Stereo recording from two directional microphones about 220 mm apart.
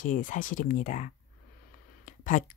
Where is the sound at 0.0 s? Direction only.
35° left (ahead or behind).